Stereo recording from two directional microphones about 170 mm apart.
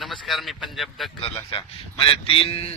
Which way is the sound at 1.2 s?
30° left (ahead or behind).